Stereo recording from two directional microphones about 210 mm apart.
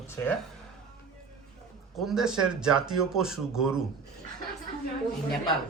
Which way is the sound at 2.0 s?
Centre (ahead or behind).